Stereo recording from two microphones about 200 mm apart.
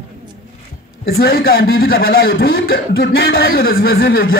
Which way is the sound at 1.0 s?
50° left (ahead or behind).